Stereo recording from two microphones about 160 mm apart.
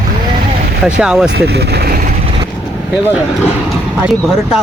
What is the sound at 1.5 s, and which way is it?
Vehicle, 85° right.